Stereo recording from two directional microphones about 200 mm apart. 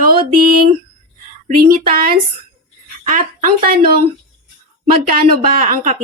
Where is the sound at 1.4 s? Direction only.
45° right (ahead or behind).